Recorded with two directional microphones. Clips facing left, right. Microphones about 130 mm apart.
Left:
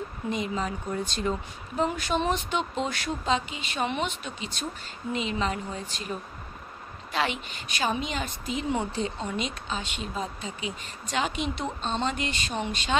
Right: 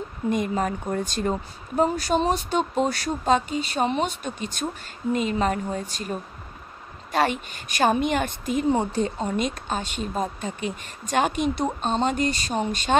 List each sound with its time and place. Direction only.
0.3 s speech: 50° right (ahead or behind)